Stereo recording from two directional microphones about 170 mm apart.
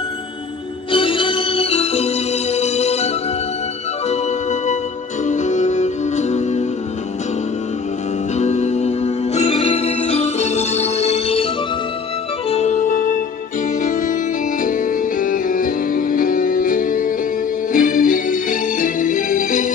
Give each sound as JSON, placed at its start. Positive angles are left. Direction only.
{"t": 0.9, "sound": "music", "side_deg": 30}
{"t": 4.1, "sound": "music", "side_deg": 45}
{"t": 8.4, "sound": "music", "side_deg": 40}
{"t": 12.4, "sound": "organ", "side_deg": 40}
{"t": 14.6, "sound": "music", "side_deg": 50}